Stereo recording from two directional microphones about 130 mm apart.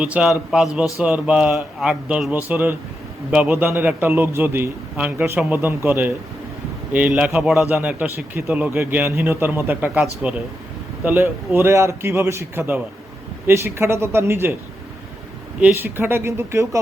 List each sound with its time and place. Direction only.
0.0 s a man's voice: 5° right (ahead or behind)
15.6 s a man's voice: 15° right (ahead or behind)